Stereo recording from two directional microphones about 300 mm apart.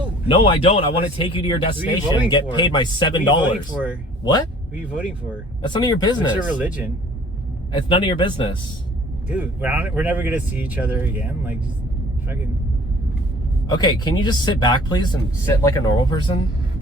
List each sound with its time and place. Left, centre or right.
0.3 s speech: centre
4.7 s speech: centre
5.6 s speech: centre
6.5 s speech: centre
7.8 s speech: centre
9.3 s speech: centre
13.7 s speech: centre